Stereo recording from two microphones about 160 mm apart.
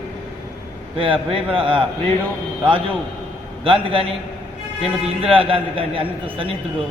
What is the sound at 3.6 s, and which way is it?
A man's voice, 35° right (ahead or behind).